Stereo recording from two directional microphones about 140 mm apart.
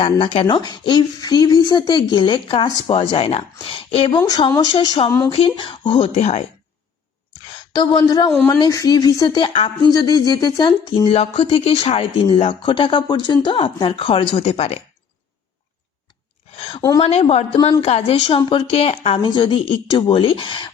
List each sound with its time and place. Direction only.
0.4 s speech: 30° left (ahead or behind); by 6.5 s 50° left (ahead or behind)
7.5 s speech: 35° left (ahead or behind)
11.1 s speech: 45° left (ahead or behind)
16.6 s a sound: 40° left (ahead or behind)
17.0 s speech: 50° left (ahead or behind)